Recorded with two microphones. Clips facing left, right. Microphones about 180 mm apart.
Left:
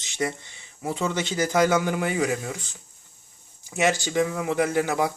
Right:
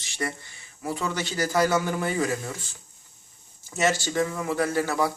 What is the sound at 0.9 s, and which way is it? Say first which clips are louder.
Speech: left 3 dB; 20° left (ahead or behind).